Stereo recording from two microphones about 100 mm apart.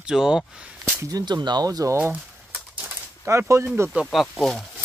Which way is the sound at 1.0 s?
35° right (ahead or behind).